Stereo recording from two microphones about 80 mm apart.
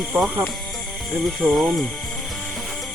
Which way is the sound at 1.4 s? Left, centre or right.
Centre.